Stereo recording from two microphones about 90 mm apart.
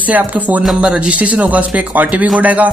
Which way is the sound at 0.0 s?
20° right (ahead or behind).